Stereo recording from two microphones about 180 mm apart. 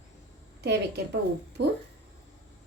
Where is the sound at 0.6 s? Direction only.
70° right (ahead or behind).